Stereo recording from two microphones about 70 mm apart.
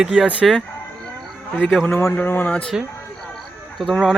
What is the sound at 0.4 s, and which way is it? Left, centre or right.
Speech, centre.